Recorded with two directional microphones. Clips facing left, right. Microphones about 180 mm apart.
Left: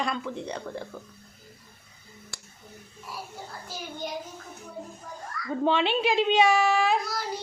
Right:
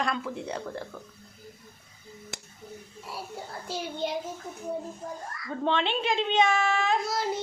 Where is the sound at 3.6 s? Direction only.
25° right (ahead or behind).